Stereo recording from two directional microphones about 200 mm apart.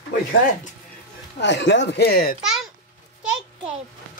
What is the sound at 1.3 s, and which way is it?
Speech, 60° left (ahead or behind).